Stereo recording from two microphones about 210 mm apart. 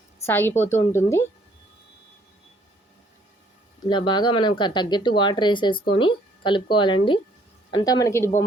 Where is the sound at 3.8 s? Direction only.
20° left (ahead or behind).